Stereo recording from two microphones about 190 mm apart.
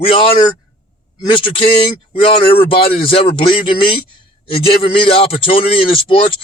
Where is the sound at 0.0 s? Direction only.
30° left (ahead or behind).